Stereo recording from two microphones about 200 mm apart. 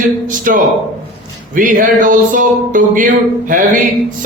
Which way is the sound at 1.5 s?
40° right (ahead or behind).